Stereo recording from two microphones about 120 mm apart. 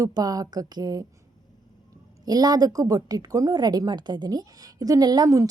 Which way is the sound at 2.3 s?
35° right (ahead or behind).